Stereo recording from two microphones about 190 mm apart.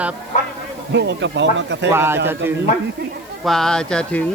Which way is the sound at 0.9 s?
70° right (ahead or behind).